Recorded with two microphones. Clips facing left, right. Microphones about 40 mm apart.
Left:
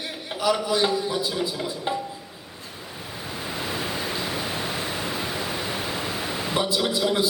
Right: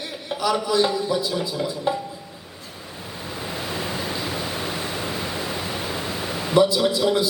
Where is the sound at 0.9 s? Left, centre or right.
Centre.